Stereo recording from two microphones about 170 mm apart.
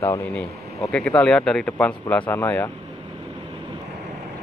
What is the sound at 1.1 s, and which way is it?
Speech, 5° left (ahead or behind).